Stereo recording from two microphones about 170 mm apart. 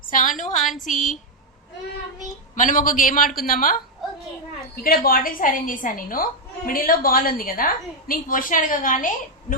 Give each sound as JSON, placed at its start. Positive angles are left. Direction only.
{"t": 0.1, "sound": "a man's voice", "side_deg": 50}
{"t": 2.6, "sound": "a man's voice", "side_deg": 50}